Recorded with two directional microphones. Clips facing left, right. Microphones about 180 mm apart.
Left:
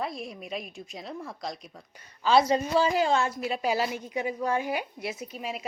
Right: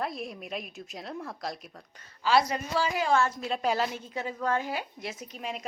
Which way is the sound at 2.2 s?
25° left (ahead or behind).